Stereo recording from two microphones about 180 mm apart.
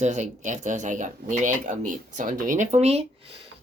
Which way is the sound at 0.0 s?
40° right (ahead or behind).